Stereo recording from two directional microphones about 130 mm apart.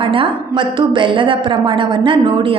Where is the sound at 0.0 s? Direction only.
40° right (ahead or behind).